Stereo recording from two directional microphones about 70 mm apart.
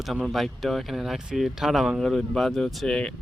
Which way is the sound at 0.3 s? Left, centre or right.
Centre.